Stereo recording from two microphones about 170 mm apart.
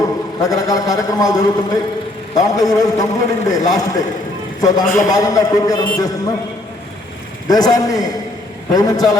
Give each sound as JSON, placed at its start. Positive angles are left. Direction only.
{"t": 0.0, "sound": "a man's voice", "side_deg": 20}
{"t": 7.4, "sound": "a man's voice", "side_deg": 20}